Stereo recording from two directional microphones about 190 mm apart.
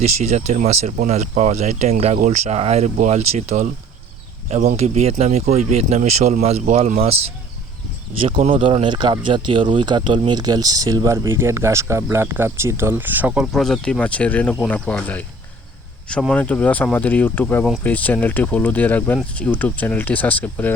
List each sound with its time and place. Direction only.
0.0 s speech: 35° right (ahead or behind)
4.8 s speech: 35° right (ahead or behind)
8.5 s speech: 30° right (ahead or behind); by 15.2 s 5° left (ahead or behind)
16.3 s speech: 10° left (ahead or behind)